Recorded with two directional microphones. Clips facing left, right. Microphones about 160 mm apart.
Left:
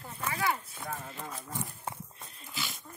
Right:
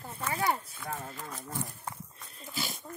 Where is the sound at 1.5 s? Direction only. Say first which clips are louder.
Even; 25° left (ahead or behind).